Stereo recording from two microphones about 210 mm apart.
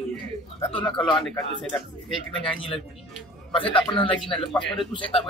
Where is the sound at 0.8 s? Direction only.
Centre (ahead or behind).